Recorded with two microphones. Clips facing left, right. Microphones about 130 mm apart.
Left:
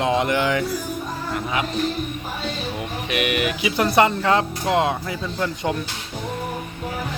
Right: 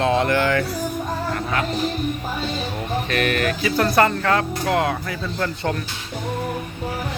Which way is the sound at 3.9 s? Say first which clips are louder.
Left 2 dB; 20° left (ahead or behind).